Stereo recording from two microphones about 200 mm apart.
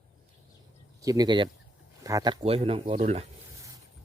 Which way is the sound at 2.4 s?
30° right (ahead or behind).